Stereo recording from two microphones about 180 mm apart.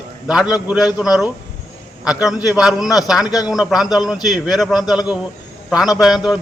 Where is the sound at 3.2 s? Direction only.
20° left (ahead or behind).